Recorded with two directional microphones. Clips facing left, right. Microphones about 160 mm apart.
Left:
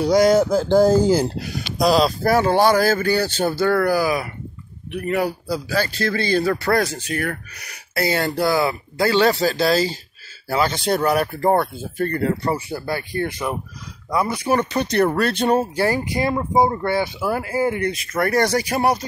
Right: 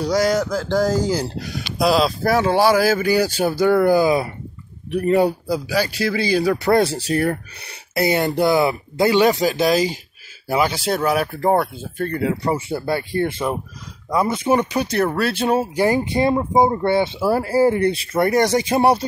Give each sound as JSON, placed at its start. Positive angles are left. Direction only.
{"t": 0.0, "sound": "speech", "side_deg": 20}
{"t": 1.4, "sound": "speech", "side_deg": 0}
{"t": 5.7, "sound": "speech", "side_deg": -10}
{"t": 6.7, "sound": "speech", "side_deg": -30}
{"t": 7.9, "sound": "speech", "side_deg": -20}
{"t": 12.5, "sound": "speech", "side_deg": -25}
{"t": 15.7, "sound": "speech", "side_deg": -20}
{"t": 18.3, "sound": "speech", "side_deg": -20}